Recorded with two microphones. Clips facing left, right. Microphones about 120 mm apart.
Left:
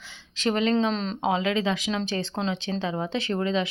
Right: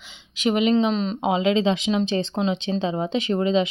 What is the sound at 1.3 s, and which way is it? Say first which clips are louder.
Speech: right 5 dB; 20° right (ahead or behind).